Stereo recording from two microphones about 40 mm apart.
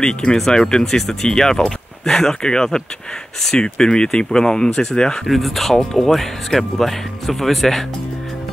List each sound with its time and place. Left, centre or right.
0.0 s speech: centre
5.2 s speech: centre